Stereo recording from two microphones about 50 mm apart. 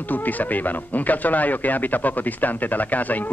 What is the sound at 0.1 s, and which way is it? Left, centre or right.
Speech, left.